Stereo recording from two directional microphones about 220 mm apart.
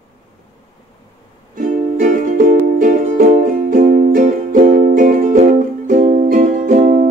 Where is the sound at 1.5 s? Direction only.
35° right (ahead or behind).